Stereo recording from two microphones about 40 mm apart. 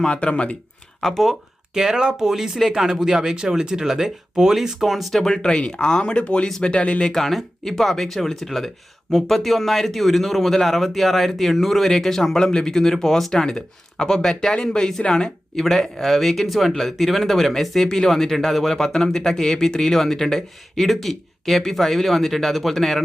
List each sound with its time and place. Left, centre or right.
0.0 s speech: left
1.0 s speech: centre
1.7 s speech: centre
5.2 s speech: centre